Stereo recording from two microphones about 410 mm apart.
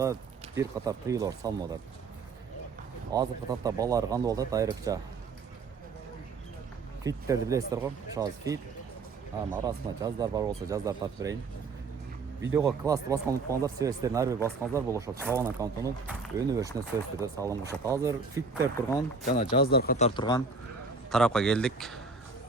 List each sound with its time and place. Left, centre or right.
0.0 s speech: centre
3.1 s speech: centre
7.0 s speech: centre
9.6 s speech: centre
12.5 s speech: centre
14.3 s a man's voice: centre
14.7 s speech: centre
18.9 s a man's voice: centre